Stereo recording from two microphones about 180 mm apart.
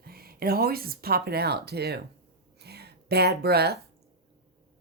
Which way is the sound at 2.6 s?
65° right (ahead or behind).